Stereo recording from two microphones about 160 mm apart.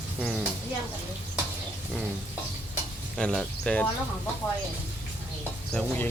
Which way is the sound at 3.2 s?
5° left (ahead or behind).